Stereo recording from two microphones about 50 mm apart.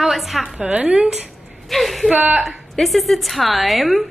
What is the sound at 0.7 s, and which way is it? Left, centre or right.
Speech, right.